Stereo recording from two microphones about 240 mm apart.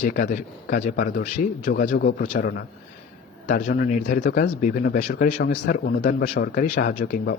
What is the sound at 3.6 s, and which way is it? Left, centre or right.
Speech, left.